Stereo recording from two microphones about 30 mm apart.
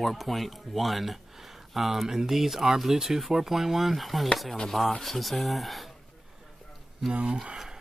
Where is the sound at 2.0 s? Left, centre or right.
Centre.